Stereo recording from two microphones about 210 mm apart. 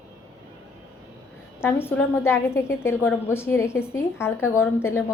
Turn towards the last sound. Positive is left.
turn(degrees=10)  # may be behind; listen again after turning